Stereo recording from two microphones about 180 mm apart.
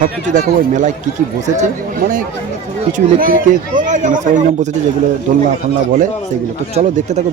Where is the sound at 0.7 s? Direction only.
45° right (ahead or behind).